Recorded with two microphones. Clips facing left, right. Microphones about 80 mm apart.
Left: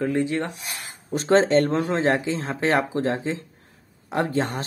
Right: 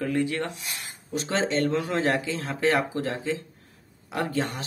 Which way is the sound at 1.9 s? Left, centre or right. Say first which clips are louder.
Left 3 dB; left.